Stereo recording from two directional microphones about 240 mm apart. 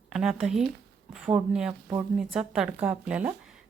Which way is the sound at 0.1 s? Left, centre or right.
Centre.